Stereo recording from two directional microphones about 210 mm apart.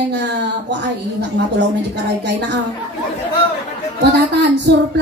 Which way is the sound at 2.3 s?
55° right (ahead or behind).